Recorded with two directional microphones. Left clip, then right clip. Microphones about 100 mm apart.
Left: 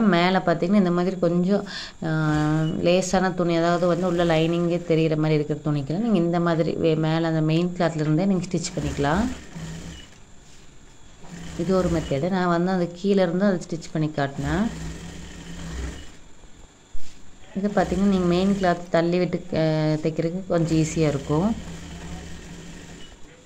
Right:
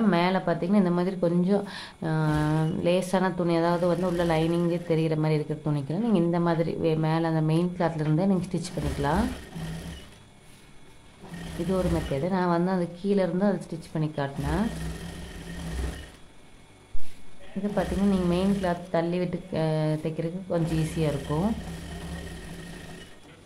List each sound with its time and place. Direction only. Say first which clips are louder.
0.1 s speech: left 5 dB; 30° left (ahead or behind)
11.7 s speech: left 5 dB; 25° left (ahead or behind)
17.7 s speech: left 5 dB; 35° left (ahead or behind)